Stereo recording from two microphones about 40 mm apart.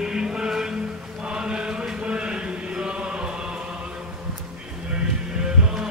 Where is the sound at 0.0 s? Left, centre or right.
Centre.